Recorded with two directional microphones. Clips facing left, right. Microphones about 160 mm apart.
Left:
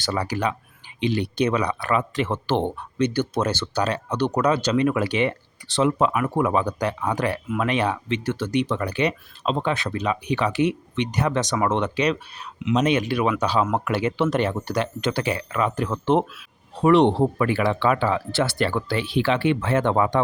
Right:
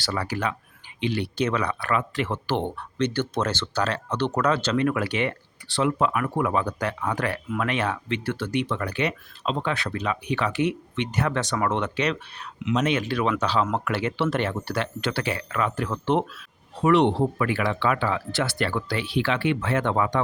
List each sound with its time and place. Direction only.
0.0 s speech: 20° left (ahead or behind)
3.0 s speech: 10° left (ahead or behind)
16.8 s speech: 30° left (ahead or behind)